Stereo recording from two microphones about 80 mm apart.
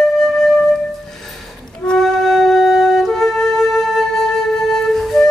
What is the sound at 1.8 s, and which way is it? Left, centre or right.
Music, centre.